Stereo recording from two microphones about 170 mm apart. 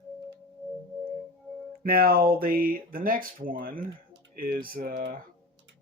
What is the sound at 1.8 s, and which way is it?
Speech, 60° right (ahead or behind).